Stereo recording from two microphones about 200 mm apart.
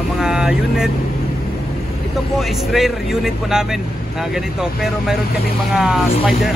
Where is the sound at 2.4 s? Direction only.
Centre (ahead or behind).